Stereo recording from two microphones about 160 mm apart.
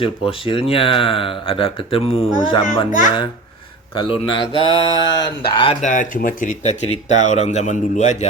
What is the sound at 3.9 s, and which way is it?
Speech, 35° left (ahead or behind).